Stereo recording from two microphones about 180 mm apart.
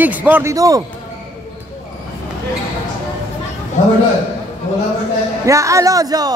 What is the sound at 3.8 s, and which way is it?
Speech, 40° left (ahead or behind).